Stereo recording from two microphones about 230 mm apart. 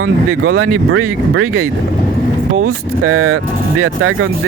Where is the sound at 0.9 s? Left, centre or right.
Right.